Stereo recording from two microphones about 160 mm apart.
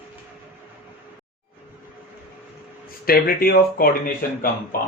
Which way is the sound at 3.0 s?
70° left (ahead or behind).